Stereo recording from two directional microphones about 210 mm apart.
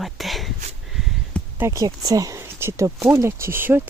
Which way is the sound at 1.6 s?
15° right (ahead or behind).